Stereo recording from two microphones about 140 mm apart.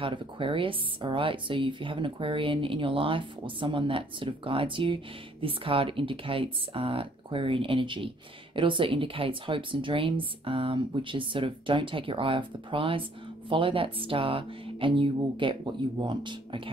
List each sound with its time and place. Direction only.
0.0 s speech: 35° right (ahead or behind)